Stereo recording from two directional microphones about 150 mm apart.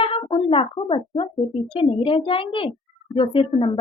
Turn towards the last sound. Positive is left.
turn(degrees=35)  # may be behind; listen again after turning